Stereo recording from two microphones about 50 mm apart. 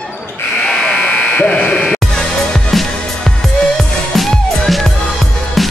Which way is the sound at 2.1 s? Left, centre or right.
Centre.